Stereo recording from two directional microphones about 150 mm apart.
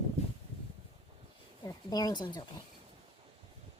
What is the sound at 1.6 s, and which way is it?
Speech, 25° left (ahead or behind).